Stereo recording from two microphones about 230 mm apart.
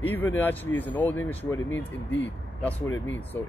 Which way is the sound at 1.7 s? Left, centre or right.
Left.